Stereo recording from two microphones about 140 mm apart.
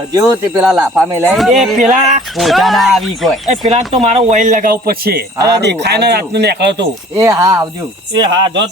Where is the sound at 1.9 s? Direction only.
60° right (ahead or behind).